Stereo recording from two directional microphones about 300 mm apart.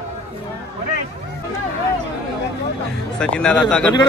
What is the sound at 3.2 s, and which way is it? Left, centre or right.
Speech, centre.